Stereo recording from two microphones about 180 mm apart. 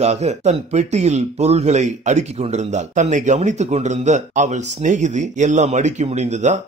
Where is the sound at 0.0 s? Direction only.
40° right (ahead or behind).